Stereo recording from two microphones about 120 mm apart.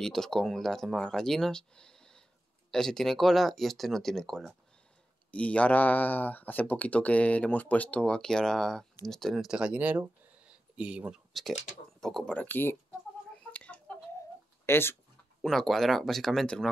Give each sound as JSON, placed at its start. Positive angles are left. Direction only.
{"t": 0.0, "sound": "speech", "side_deg": 5}
{"t": 13.3, "sound": "chicken", "side_deg": 10}
{"t": 14.7, "sound": "speech", "side_deg": 20}
{"t": 15.4, "sound": "speech", "side_deg": 0}